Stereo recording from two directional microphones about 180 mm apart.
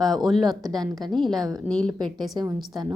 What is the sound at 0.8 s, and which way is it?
Speech, 20° right (ahead or behind).